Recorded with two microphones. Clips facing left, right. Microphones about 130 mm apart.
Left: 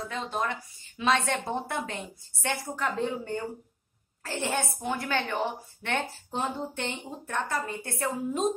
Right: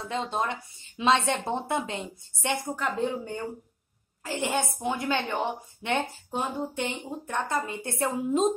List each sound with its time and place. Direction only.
0.0 s a woman's voice: 25° right (ahead or behind)